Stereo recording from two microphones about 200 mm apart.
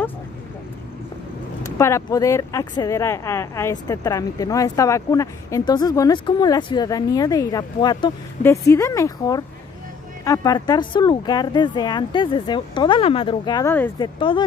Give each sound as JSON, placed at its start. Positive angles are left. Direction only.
{"t": 1.8, "sound": "speech", "side_deg": 15}
{"t": 13.7, "sound": "speech", "side_deg": 10}
{"t": 13.9, "sound": "speech", "side_deg": 25}